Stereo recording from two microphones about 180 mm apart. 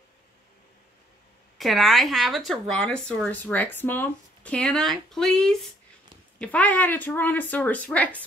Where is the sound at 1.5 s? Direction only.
Centre (ahead or behind).